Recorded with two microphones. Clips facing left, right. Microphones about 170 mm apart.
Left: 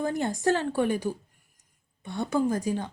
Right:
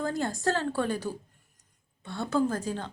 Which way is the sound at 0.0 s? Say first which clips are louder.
Left 3 dB; 20° left (ahead or behind).